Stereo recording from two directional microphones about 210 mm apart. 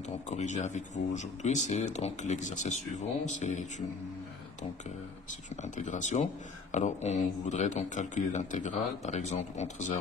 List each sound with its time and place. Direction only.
0.3 s speech: 35° left (ahead or behind)
5.6 s speech: 35° left (ahead or behind)